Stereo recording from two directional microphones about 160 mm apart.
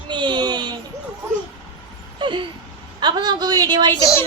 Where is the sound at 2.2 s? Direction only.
30° right (ahead or behind).